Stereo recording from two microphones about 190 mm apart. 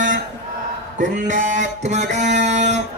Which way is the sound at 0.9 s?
40° right (ahead or behind).